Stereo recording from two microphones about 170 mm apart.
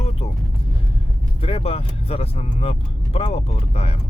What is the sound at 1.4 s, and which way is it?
Speech, 35° left (ahead or behind).